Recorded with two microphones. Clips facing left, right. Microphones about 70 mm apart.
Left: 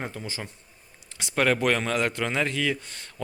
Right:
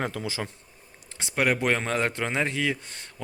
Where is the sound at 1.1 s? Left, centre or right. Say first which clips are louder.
Even; right.